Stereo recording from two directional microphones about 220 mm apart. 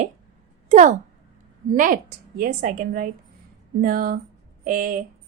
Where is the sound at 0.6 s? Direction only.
35° right (ahead or behind).